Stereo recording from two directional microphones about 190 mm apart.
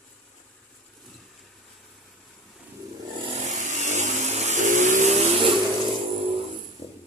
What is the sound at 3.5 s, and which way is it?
Vehicle, 40° right (ahead or behind).